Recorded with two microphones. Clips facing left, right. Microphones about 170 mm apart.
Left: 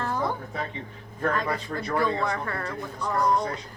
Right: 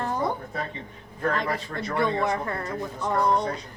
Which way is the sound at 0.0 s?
15° right (ahead or behind).